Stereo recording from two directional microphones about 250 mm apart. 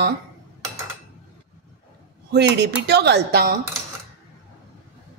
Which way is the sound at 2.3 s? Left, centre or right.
Right.